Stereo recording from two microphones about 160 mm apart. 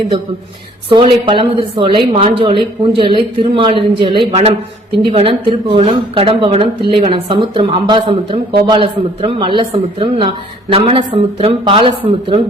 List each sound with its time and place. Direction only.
0.9 s a woman's voice: 35° right (ahead or behind)